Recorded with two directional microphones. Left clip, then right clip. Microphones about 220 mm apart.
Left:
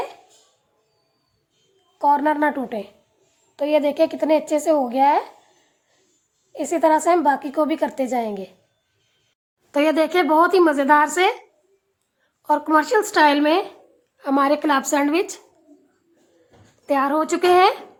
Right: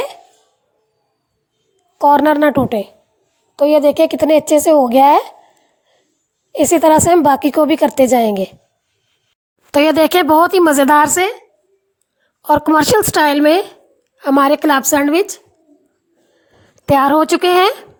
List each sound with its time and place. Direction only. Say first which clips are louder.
2.0 s a woman's voice: right 8 dB; 40° right (ahead or behind)
6.5 s a woman's voice: right 8 dB; 40° right (ahead or behind)
9.7 s a woman's voice: right 7 dB; 40° right (ahead or behind)
11.2 s a woman's voice: right 2 dB; 20° right (ahead or behind)
12.4 s a woman's voice: right 6 dB; 40° right (ahead or behind); by 15.4 s 20° right (ahead or behind)
16.8 s a woman's voice: right 9 dB; 40° right (ahead or behind)